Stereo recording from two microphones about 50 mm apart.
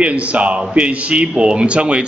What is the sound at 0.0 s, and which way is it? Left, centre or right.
A man's voice, right.